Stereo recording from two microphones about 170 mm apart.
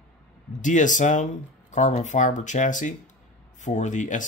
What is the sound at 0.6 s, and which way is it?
Speech, 45° left (ahead or behind).